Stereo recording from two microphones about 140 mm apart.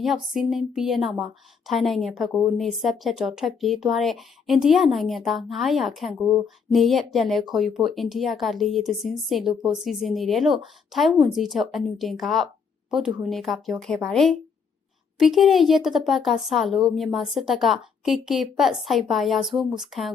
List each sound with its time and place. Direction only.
0.0 s speech: centre (ahead or behind)